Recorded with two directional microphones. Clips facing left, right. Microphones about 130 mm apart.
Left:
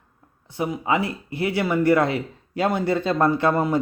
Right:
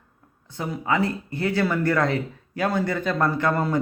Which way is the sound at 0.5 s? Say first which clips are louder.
Left 2 dB; 20° left (ahead or behind).